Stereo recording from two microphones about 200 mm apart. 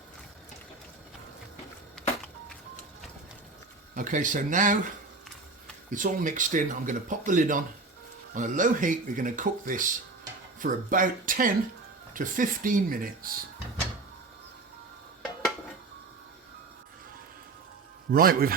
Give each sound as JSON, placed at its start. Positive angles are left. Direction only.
{"t": 2.0, "sound": "a sound", "side_deg": 0}
{"t": 3.9, "sound": "speech", "side_deg": -40}
{"t": 5.9, "sound": "speech", "side_deg": -40}
{"t": 18.1, "sound": "speech", "side_deg": -45}